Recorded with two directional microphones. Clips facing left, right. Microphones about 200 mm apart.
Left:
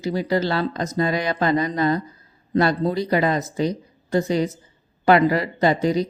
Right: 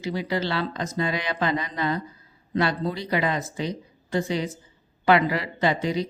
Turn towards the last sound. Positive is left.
turn(degrees=40)  # may be behind; listen again after turning